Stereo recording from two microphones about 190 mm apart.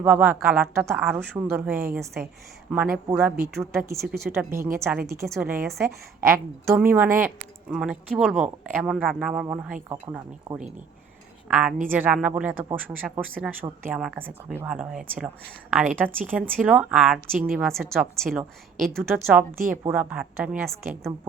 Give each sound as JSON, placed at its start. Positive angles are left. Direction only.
{"t": 0.0, "sound": "a woman's voice", "side_deg": -10}
{"t": 9.9, "sound": "speech", "side_deg": -15}
{"t": 11.4, "sound": "a woman's voice", "side_deg": -5}